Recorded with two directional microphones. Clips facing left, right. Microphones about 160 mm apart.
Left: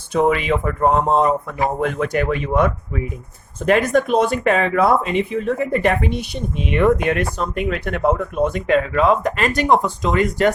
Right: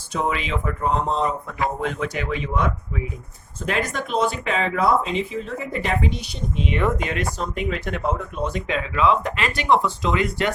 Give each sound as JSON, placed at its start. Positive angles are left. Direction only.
{"t": 0.1, "sound": "speech", "side_deg": 55}